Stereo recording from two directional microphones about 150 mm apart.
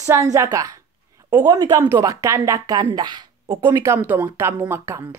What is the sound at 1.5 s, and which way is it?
Speech, 20° right (ahead or behind).